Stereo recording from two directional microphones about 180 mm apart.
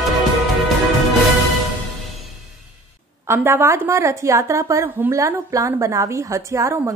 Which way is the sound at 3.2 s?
15° right (ahead or behind).